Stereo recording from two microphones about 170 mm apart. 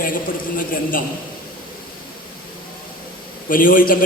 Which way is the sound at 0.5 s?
55° left (ahead or behind).